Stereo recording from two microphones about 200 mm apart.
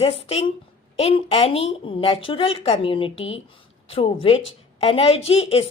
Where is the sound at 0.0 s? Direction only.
30° left (ahead or behind).